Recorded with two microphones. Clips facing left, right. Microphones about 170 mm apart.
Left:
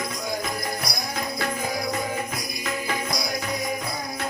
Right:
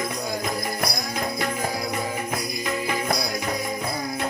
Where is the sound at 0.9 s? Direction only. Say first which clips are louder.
Right 2 dB; 55° right (ahead or behind).